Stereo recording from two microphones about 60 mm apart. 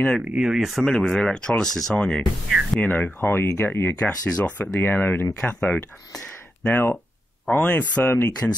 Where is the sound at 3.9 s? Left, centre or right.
Left.